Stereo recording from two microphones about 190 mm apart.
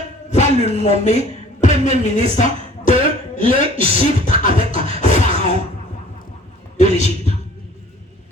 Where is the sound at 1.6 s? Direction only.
40° left (ahead or behind).